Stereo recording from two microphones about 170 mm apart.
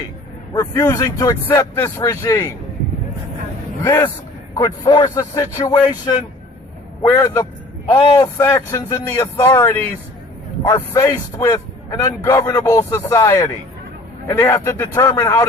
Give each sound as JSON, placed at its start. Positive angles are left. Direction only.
{"t": 0.5, "sound": "a man's voice", "side_deg": 20}
{"t": 3.8, "sound": "a man's voice", "side_deg": 15}
{"t": 7.0, "sound": "a man's voice", "side_deg": 20}